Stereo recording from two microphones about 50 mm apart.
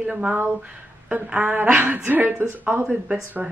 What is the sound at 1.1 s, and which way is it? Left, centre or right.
A woman's voice, right.